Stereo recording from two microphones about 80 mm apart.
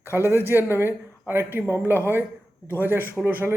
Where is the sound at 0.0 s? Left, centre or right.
Right.